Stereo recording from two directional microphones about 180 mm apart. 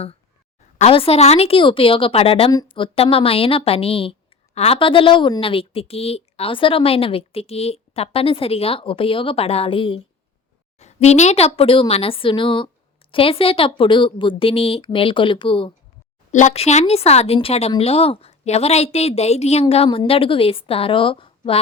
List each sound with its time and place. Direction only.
0.8 s a woman's voice: 35° left (ahead or behind)
16.3 s a woman's voice: 40° left (ahead or behind)